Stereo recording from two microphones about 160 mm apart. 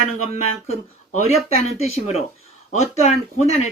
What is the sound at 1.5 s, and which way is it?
A man's voice, 40° left (ahead or behind).